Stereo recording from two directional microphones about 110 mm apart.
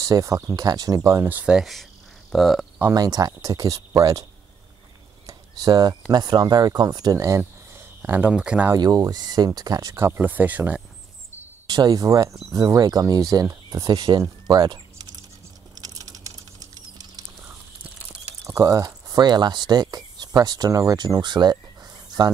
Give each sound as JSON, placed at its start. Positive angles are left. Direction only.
{"t": 0.0, "sound": "speech", "side_deg": -30}
{"t": 1.2, "sound": "speech", "side_deg": -10}
{"t": 2.9, "sound": "speech", "side_deg": -35}
{"t": 8.0, "sound": "speech", "side_deg": -15}
{"t": 8.7, "sound": "speech", "side_deg": -35}
{"t": 11.6, "sound": "speech", "side_deg": -40}
{"t": 14.5, "sound": "a sound", "side_deg": -40}
{"t": 18.4, "sound": "speech", "side_deg": -30}